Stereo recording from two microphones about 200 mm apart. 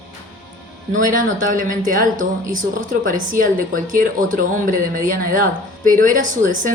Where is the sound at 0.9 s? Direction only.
40° right (ahead or behind).